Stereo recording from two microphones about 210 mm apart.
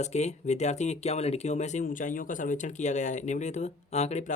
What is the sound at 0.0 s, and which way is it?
Speech, 35° left (ahead or behind).